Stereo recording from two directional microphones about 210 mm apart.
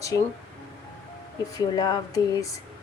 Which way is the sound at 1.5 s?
20° left (ahead or behind).